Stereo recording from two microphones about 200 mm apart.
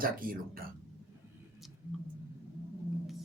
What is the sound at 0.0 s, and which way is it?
Speech, 45° right (ahead or behind).